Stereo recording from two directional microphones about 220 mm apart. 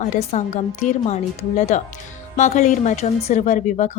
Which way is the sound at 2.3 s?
30° left (ahead or behind).